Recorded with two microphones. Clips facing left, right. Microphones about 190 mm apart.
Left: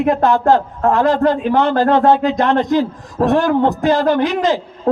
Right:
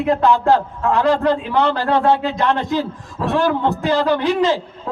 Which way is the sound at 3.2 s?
55° left (ahead or behind).